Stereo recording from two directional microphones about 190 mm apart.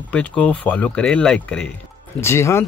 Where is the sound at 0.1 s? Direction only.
5° left (ahead or behind).